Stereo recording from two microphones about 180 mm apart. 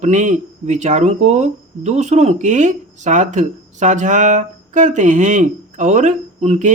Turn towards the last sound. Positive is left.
turn(degrees=-40)  # may be behind; listen again after turning